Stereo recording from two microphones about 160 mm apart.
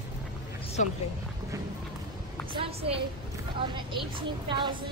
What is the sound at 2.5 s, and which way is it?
A woman's voice, 35° right (ahead or behind).